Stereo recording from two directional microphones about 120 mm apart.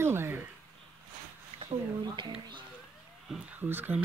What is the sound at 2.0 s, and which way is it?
Speech, 40° right (ahead or behind).